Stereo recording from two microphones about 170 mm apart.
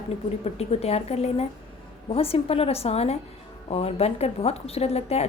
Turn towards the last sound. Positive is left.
turn(degrees=35)  # may be behind; listen again after turning